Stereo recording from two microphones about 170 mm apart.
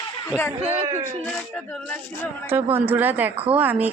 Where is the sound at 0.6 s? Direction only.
40° right (ahead or behind).